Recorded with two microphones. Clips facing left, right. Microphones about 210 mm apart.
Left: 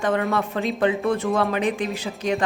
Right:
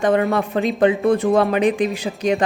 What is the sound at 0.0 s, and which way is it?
A woman's voice, 15° right (ahead or behind).